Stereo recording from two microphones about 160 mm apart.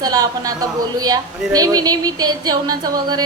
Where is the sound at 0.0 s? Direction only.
25° right (ahead or behind).